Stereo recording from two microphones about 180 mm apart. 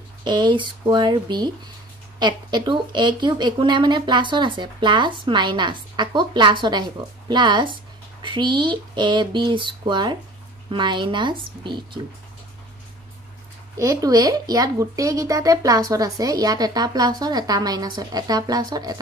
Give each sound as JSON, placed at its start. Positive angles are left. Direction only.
{"t": 0.2, "sound": "speech", "side_deg": -25}
{"t": 13.7, "sound": "speech", "side_deg": -20}